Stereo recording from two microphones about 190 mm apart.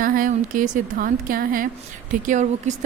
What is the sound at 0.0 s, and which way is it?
A woman's voice, 45° right (ahead or behind).